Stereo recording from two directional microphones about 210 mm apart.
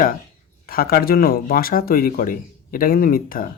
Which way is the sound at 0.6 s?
45° left (ahead or behind).